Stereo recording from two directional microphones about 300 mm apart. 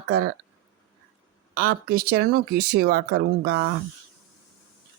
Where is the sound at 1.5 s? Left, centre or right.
Right.